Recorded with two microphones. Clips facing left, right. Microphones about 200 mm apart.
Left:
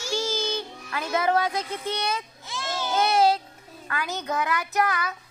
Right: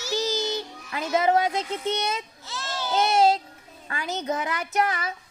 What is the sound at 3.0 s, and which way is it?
Music, 20° right (ahead or behind).